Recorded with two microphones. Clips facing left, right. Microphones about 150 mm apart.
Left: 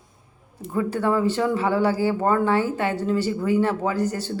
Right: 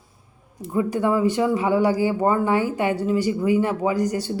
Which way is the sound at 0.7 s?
15° right (ahead or behind).